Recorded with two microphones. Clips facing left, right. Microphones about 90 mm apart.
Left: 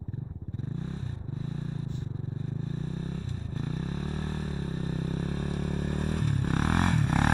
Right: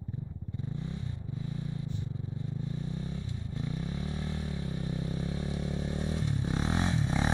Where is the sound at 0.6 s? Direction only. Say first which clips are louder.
Left 2 dB; 35° left (ahead or behind).